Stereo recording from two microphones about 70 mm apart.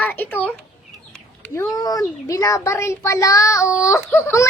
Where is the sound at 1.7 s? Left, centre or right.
Left.